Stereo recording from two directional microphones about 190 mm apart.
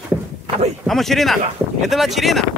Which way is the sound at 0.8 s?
Centre (ahead or behind).